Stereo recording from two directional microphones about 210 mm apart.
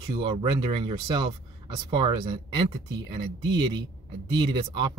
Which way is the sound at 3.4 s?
60° right (ahead or behind).